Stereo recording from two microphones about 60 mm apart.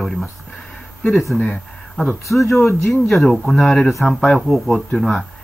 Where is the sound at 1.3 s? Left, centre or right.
Left.